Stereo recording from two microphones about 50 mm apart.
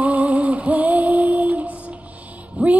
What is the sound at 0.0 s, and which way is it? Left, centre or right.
Female singing, right.